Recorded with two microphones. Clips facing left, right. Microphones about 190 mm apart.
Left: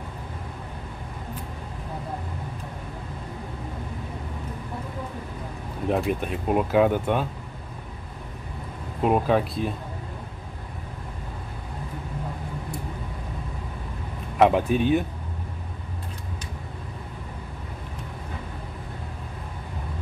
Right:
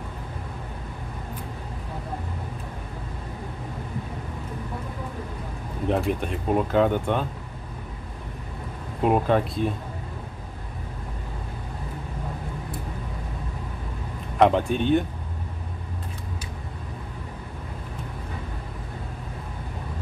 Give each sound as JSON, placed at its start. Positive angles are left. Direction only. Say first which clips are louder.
{"t": 5.9, "sound": "speech", "louder": "even", "side_deg": 5}
{"t": 9.0, "sound": "speech", "louder": "even", "side_deg": 0}
{"t": 14.4, "sound": "speech", "louder": "left 1 dB", "side_deg": 5}